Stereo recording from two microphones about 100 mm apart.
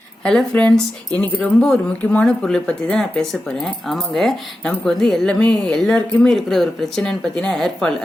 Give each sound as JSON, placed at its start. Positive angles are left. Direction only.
{"t": 0.3, "sound": "speech", "side_deg": 10}